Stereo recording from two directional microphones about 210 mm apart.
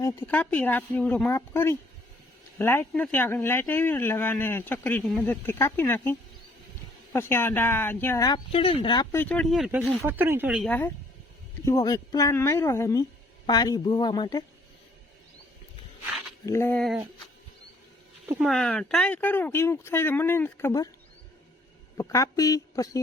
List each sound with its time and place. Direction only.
0.0 s speech: 10° left (ahead or behind)
9.1 s speech: 5° left (ahead or behind)
10.7 s speech: 10° left (ahead or behind)
16.5 s speech: 10° left (ahead or behind)
18.3 s speech: 5° right (ahead or behind); by 20.9 s 15° left (ahead or behind)
21.9 s speech: 15° left (ahead or behind)